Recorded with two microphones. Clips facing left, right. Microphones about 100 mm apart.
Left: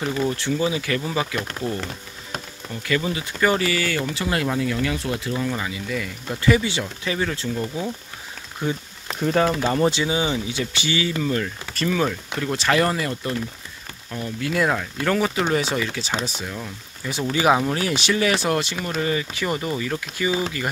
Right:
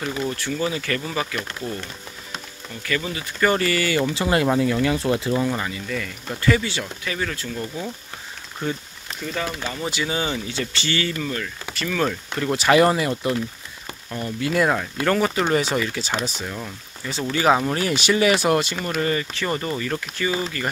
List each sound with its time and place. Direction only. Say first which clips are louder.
0.4 s speech: left 2 dB; 15° left (ahead or behind)
2.7 s speech: left 3 dB; 20° left (ahead or behind)
3.3 s speech: right 1 dB; 10° left (ahead or behind)
4.0 s speech: right 4 dB; 30° right (ahead or behind)
5.6 s speech: even; 5° left (ahead or behind)
9.2 s speech: left 8 dB; 45° left (ahead or behind)
10.0 s speech: left 2 dB; 15° left (ahead or behind)
12.1 s speech: right 2 dB; centre (ahead or behind)
14.1 s speech: right 2 dB; centre (ahead or behind)
17.0 s speech: even; 10° left (ahead or behind)
17.6 s speech: right 1 dB; centre (ahead or behind)